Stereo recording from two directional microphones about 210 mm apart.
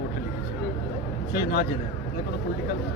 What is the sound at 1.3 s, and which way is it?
Speech, 50° left (ahead or behind).